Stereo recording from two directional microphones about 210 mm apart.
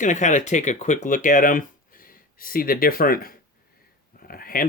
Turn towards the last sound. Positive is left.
turn(degrees=45)  # may be behind; listen again after turning